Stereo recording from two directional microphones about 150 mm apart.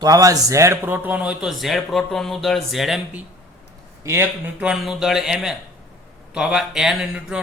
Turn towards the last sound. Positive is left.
turn(degrees=-5)  # may be behind; listen again after turning